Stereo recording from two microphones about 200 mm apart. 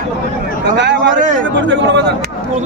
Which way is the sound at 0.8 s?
60° right (ahead or behind).